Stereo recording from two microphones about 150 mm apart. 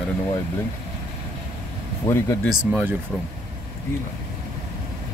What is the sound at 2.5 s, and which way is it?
Speech, 10° right (ahead or behind).